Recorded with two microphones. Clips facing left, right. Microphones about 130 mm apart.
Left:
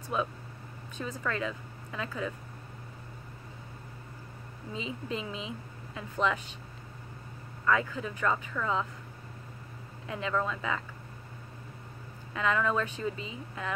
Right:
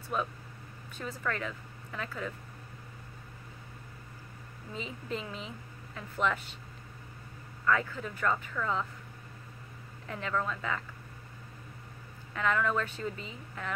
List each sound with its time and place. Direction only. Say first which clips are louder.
0.9 s speech: left 2 dB; 20° left (ahead or behind)
4.7 s speech: left 2 dB; 20° left (ahead or behind)
7.7 s speech: left 2 dB; 15° left (ahead or behind)
10.0 s speech: left 2 dB; 15° left (ahead or behind)
12.4 s speech: left 1 dB; 20° left (ahead or behind)